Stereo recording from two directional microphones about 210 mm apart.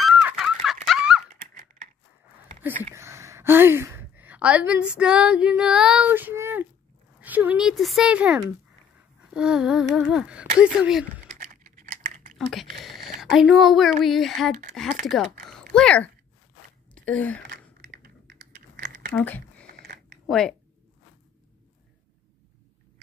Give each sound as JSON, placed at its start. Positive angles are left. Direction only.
{"t": 0.0, "sound": "fowl", "side_deg": 0}
{"t": 0.8, "sound": "dog", "side_deg": -5}
{"t": 2.9, "sound": "a woman's voice", "side_deg": -15}
{"t": 11.2, "sound": "a sound", "side_deg": -35}
{"t": 12.4, "sound": "speech", "side_deg": 0}
{"t": 15.7, "sound": "speech", "side_deg": 5}
{"t": 16.9, "sound": "gasp", "side_deg": 5}
{"t": 17.8, "sound": "typing", "side_deg": -50}
{"t": 19.1, "sound": "speech", "side_deg": 10}